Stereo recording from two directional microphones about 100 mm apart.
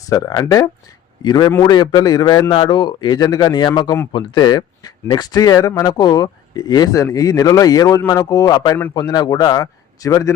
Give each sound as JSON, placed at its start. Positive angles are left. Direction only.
{"t": 0.1, "sound": "speech", "side_deg": 40}
{"t": 2.5, "sound": "speech", "side_deg": 55}